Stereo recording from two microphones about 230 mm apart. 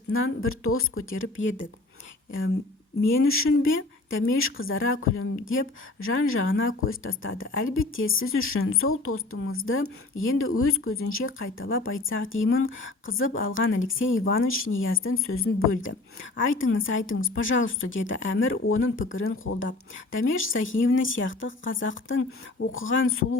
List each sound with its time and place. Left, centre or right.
0.1 s speech: left
3.0 s speech: left